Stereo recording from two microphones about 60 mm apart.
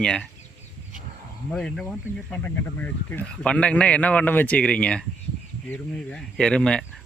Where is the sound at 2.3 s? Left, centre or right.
Left.